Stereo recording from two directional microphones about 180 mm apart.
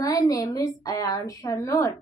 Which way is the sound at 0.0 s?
20° left (ahead or behind).